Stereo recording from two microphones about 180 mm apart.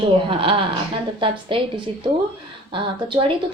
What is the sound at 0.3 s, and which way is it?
A woman's voice, 30° right (ahead or behind).